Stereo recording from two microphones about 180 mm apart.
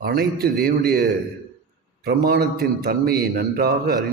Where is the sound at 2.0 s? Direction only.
60° right (ahead or behind).